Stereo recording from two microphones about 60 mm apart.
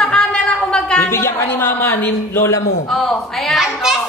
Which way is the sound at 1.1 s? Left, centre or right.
Left.